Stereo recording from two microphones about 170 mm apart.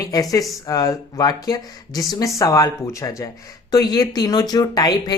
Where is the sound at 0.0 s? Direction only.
20° left (ahead or behind).